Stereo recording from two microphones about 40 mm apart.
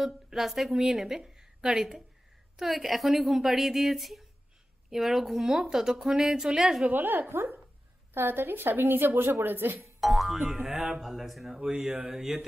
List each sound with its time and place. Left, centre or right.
0.0 s a woman's voice: centre
6.9 s a woman's voice: right
9.8 s a woman's voice: centre